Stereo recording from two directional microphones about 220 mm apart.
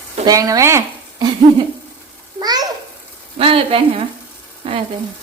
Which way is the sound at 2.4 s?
20° right (ahead or behind).